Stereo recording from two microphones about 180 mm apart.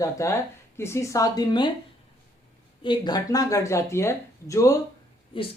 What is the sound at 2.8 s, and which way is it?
Speech, 20° left (ahead or behind).